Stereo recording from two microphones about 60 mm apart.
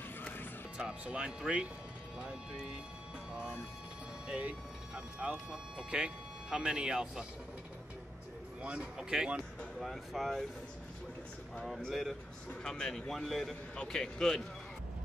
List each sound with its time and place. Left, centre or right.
0.7 s speech: centre
4.3 s speech: right
8.6 s speech: centre
11.9 s speech: centre
12.6 s a man's voice: centre
13.7 s a man's voice: centre